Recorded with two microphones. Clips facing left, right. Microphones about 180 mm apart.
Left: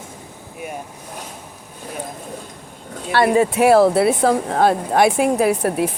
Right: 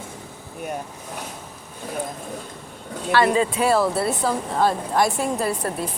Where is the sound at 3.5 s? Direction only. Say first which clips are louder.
Left 7 dB; 70° left (ahead or behind).